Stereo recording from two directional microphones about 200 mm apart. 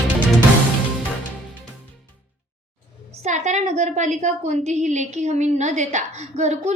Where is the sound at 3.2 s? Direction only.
35° right (ahead or behind).